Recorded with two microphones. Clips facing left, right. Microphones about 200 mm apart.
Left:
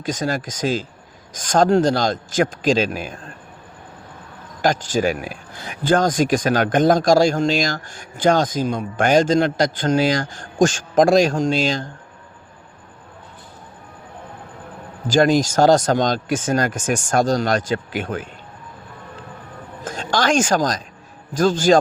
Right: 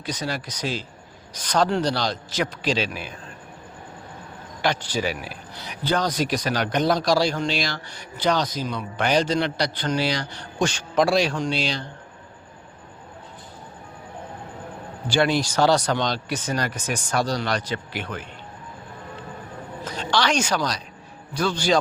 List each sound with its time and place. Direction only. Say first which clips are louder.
0.0 s speech: left 6 dB; 45° left (ahead or behind)
4.6 s speech: left 6 dB; 45° left (ahead or behind)
15.0 s speech: left 6 dB; 45° left (ahead or behind)
19.8 s a woman's voice: left 3 dB; 45° left (ahead or behind)